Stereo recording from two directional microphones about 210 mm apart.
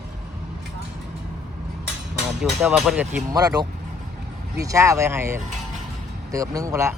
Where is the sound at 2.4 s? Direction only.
5° right (ahead or behind).